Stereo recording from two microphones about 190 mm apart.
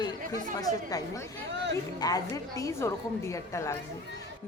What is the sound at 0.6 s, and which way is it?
A woman's voice, 20° left (ahead or behind).